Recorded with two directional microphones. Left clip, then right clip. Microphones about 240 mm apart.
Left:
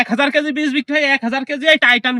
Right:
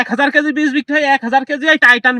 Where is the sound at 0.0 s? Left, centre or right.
Centre.